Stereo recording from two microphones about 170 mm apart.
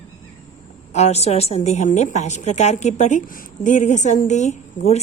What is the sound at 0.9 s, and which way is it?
A woman's voice, 40° left (ahead or behind).